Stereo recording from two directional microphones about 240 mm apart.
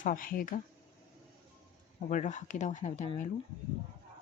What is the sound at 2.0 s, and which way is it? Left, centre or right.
Speech, left.